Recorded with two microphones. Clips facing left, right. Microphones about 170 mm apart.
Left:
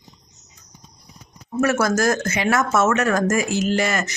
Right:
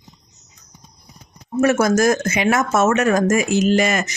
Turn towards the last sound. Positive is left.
turn(degrees=-20)  # may be behind; listen again after turning